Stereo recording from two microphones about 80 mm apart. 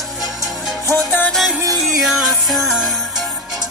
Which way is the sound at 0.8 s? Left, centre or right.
Left.